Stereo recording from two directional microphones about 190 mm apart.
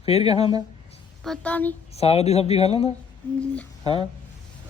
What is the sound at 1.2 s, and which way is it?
Speech, 5° left (ahead or behind).